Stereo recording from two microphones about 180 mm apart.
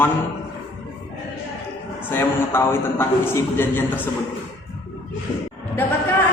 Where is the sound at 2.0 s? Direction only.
10° left (ahead or behind).